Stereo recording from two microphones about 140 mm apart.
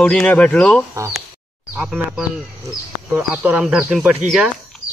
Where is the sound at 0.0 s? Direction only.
10° left (ahead or behind).